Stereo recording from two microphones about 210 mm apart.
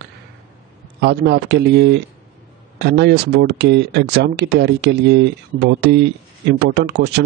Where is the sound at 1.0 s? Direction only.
50° right (ahead or behind).